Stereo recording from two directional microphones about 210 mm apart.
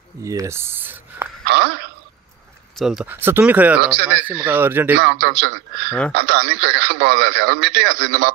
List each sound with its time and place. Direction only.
0.2 s speech: 15° right (ahead or behind)
1.5 s a sound: 50° right (ahead or behind)
2.8 s speech: centre (ahead or behind)
3.8 s speech: 50° right (ahead or behind)
4.1 s speech: 5° right (ahead or behind)
5.0 s speech: 50° right (ahead or behind)
5.9 s speech: 5° left (ahead or behind)
6.1 s speech: 50° right (ahead or behind)